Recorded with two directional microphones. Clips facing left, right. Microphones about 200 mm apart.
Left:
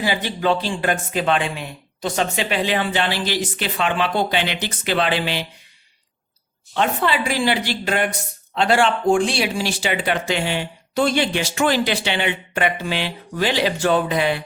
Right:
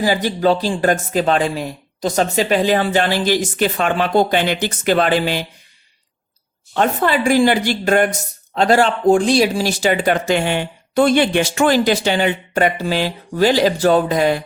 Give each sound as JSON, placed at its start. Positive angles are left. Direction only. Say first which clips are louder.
{"t": 0.0, "sound": "speech", "louder": "right 5 dB", "side_deg": -40}
{"t": 6.7, "sound": "speech", "louder": "right 4 dB", "side_deg": -45}